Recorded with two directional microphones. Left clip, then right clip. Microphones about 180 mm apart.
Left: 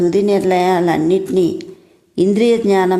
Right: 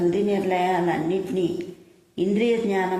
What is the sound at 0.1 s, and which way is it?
A woman's voice, 30° left (ahead or behind).